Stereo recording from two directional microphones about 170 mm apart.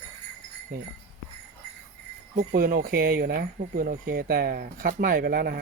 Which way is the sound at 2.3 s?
60° right (ahead or behind).